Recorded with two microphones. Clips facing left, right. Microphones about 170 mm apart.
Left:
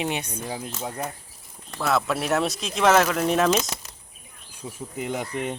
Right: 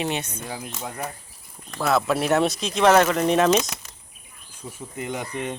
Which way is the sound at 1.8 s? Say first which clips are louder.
Right 3 dB; centre (ahead or behind).